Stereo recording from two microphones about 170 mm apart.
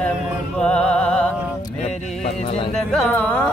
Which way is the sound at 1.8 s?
40° left (ahead or behind).